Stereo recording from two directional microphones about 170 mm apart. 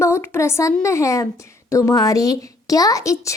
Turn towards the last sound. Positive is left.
turn(degrees=20)  # may be behind; listen again after turning